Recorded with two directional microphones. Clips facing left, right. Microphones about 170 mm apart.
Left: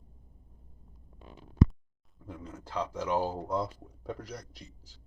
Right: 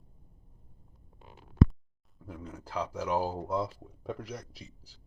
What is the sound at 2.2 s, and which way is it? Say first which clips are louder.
Speech: even; centre (ahead or behind).